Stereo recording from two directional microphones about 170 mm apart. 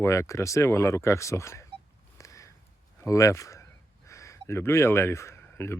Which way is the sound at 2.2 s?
20° left (ahead or behind).